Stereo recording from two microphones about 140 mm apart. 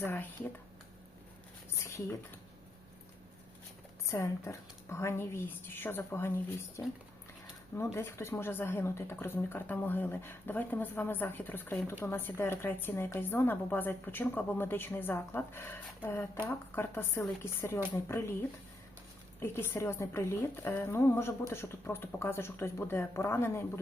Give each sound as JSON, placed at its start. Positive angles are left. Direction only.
{"t": 0.0, "sound": "a woman's voice", "side_deg": 15}
{"t": 1.7, "sound": "a sound", "side_deg": 20}
{"t": 4.0, "sound": "a woman's voice", "side_deg": 20}
{"t": 7.9, "sound": "a woman's voice", "side_deg": 15}
{"t": 19.4, "sound": "a woman's voice", "side_deg": 15}